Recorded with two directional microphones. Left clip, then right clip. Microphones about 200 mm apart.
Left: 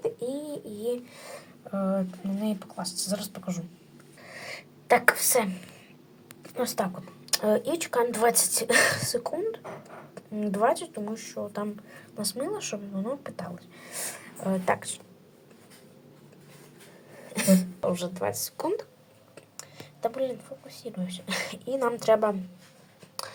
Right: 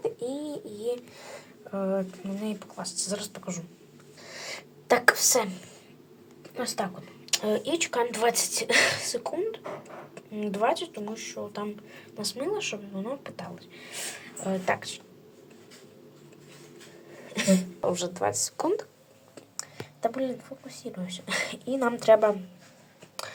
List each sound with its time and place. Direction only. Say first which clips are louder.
0.0 s speech: even; 5° left (ahead or behind)
4.2 s owl: right 1 dB; 5° right (ahead or behind)
4.9 s a woman's voice: even; 5° right (ahead or behind)
6.6 s a woman's voice: left 2 dB; 15° left (ahead or behind)
17.3 s a woman's voice: left 1 dB; 15° left (ahead or behind)
17.8 s a woman's voice: right 3 dB; 15° right (ahead or behind)
23.2 s a sound: even; 5° right (ahead or behind)